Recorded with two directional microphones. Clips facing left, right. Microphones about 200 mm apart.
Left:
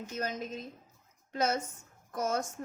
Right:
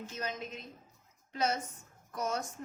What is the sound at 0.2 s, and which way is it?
A woman's voice, 45° left (ahead or behind).